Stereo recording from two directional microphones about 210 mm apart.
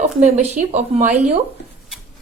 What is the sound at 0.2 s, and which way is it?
A woman's voice, 35° right (ahead or behind).